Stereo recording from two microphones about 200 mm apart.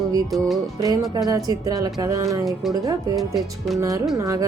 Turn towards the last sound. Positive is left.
turn(degrees=-20)  # may be behind; listen again after turning